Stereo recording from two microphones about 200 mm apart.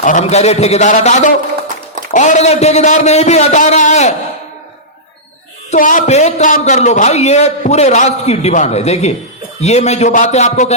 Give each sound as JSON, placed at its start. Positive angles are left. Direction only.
{"t": 0.0, "sound": "a man's voice", "side_deg": 35}
{"t": 5.7, "sound": "a man's voice", "side_deg": 40}